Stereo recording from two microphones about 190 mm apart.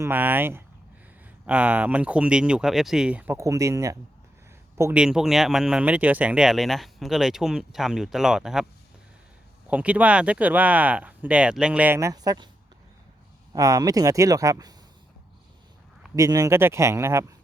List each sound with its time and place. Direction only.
0.0 s speech: 10° right (ahead or behind)
9.6 s speech: 5° right (ahead or behind)
13.5 s speech: 20° right (ahead or behind)
16.1 s speech: 15° right (ahead or behind)